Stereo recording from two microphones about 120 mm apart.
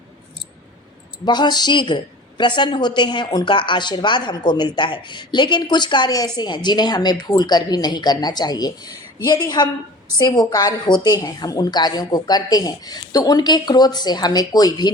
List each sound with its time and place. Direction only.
1.2 s speech: 35° left (ahead or behind)